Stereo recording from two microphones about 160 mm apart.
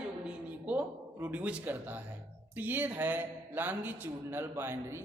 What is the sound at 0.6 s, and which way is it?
A man's voice, 10° right (ahead or behind).